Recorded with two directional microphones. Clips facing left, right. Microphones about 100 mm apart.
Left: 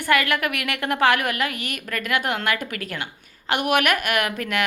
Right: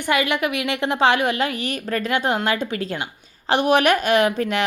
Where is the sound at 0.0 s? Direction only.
20° right (ahead or behind).